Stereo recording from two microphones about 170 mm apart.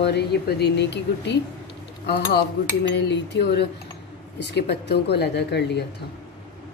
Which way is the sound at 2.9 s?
85° left.